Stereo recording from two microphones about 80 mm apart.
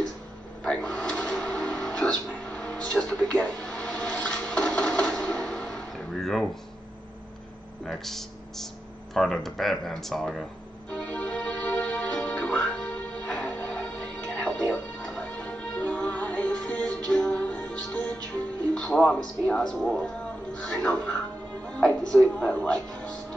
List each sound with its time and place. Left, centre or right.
0.7 s music: centre
7.8 s speech: centre
10.9 s music: centre
19.7 s speech: centre